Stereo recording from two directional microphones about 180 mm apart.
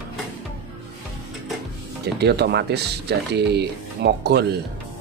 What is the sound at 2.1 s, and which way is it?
Speech, 65° right (ahead or behind).